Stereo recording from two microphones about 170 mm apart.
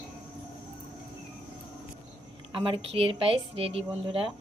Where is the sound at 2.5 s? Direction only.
30° right (ahead or behind).